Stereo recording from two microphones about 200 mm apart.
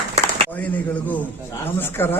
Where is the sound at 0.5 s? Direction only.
10° left (ahead or behind).